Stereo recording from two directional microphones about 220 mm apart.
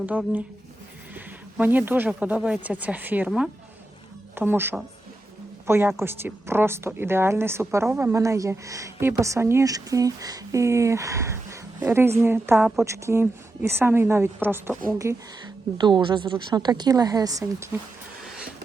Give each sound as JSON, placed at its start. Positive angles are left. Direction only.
{"t": 0.0, "sound": "a woman's voice", "side_deg": -5}